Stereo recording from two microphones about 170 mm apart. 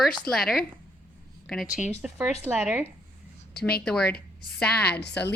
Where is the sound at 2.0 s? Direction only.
5° right (ahead or behind).